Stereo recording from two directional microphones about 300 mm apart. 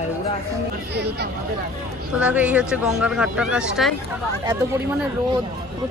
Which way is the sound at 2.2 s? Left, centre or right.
Centre.